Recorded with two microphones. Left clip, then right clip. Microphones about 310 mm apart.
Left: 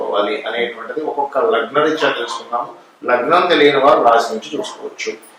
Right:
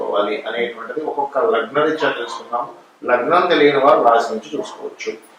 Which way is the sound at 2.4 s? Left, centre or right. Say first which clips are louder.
Left 2 dB; centre.